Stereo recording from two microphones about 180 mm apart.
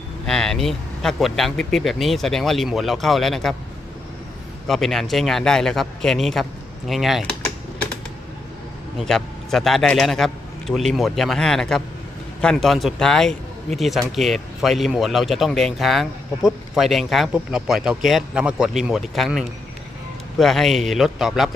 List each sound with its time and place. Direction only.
0.3 s a man's voice: 5° left (ahead or behind)
4.7 s a man's voice: centre (ahead or behind)
9.0 s a man's voice: centre (ahead or behind)